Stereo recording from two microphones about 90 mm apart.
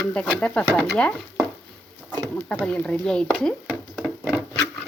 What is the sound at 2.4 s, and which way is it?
Speech, 10° left (ahead or behind).